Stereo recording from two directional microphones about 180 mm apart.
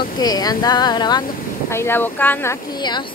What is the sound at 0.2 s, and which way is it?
Speech, 20° left (ahead or behind).